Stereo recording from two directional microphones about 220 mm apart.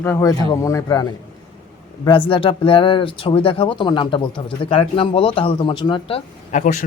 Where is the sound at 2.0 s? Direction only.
25° left (ahead or behind).